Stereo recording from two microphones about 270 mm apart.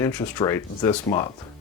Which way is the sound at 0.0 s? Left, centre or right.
Centre.